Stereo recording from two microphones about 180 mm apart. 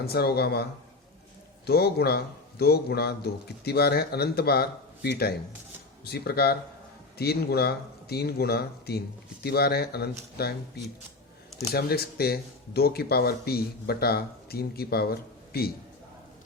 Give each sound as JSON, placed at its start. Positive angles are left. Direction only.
{"t": 0.0, "sound": "speech", "side_deg": 60}
{"t": 11.7, "sound": "speech", "side_deg": 60}